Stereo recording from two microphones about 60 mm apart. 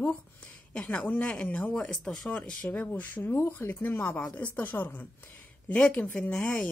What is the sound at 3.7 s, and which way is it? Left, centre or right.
Speech, left.